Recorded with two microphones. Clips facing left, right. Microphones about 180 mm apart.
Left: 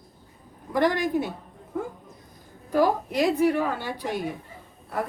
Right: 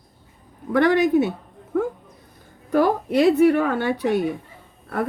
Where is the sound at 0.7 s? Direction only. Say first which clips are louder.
Right 6 dB; 65° right (ahead or behind).